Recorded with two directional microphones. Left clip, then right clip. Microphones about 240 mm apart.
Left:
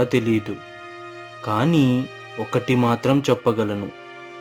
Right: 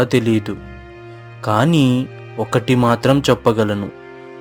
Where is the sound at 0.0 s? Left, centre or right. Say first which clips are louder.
Right 4 dB; right.